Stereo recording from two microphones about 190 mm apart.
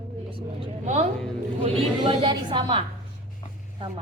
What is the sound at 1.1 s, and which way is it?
Speech, 5° left (ahead or behind).